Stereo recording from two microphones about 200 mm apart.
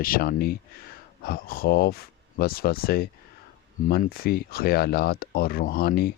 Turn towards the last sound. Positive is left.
turn(degrees=50)  # may be behind; listen again after turning